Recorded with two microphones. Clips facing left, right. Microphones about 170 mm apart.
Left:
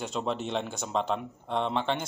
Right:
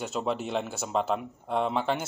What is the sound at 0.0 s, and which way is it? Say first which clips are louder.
Speech: right 1 dB; 5° right (ahead or behind).